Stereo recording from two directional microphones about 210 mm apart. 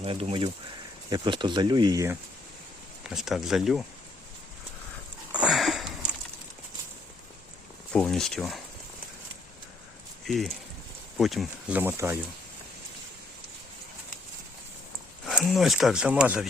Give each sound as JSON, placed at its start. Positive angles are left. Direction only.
{"t": 0.0, "sound": "speech", "side_deg": -30}
{"t": 3.0, "sound": "speech", "side_deg": 0}
{"t": 5.3, "sound": "sniff", "side_deg": -5}
{"t": 7.9, "sound": "speech", "side_deg": 5}
{"t": 10.2, "sound": "speech", "side_deg": 0}
{"t": 15.4, "sound": "speech", "side_deg": 0}